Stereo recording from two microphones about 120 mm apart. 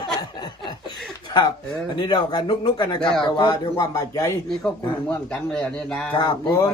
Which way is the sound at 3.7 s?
30° left (ahead or behind).